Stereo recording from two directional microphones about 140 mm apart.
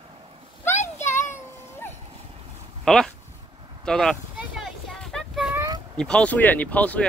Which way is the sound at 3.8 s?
5° left (ahead or behind).